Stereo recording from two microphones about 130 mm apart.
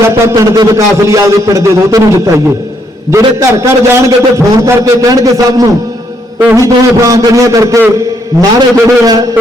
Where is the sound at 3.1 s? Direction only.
20° right (ahead or behind).